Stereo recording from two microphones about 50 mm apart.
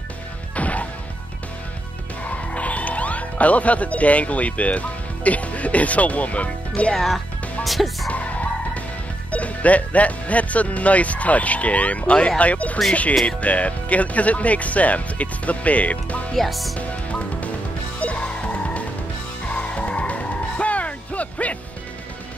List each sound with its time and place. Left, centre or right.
0.6 s music: left
2.2 s speech: left
7.6 s speech: centre
8.1 s music: left
9.3 s speech: left
16.3 s speech: centre
16.7 s music: left